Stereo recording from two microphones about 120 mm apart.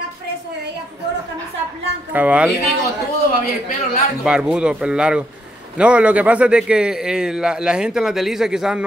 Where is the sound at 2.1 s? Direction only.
10° right (ahead or behind).